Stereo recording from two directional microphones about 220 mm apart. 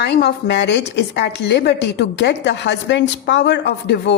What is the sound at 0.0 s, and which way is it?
A woman's voice, 50° left (ahead or behind).